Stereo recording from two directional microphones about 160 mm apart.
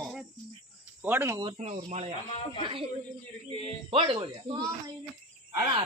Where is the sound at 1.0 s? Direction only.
15° right (ahead or behind).